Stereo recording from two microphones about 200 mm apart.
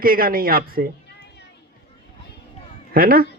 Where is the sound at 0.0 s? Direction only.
45° right (ahead or behind).